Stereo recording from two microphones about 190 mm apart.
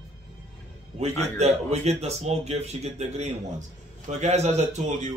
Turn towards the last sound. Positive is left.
turn(degrees=-35)  # may be behind; listen again after turning